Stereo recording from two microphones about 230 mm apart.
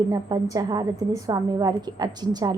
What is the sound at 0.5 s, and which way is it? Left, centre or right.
A woman's voice, centre.